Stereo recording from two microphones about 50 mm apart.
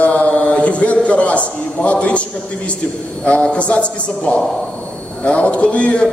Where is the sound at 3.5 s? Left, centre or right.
Left.